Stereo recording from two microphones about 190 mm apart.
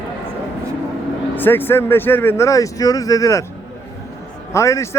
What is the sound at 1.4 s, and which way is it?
Speech, 10° left (ahead or behind).